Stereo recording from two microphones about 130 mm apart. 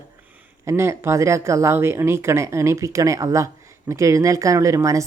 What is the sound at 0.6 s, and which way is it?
Speech, 20° right (ahead or behind).